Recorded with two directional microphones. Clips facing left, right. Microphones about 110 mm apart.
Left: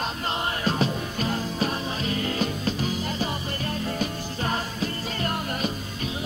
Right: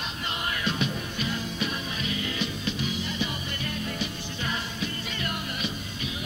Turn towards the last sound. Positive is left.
turn(degrees=40)  # may be behind; listen again after turning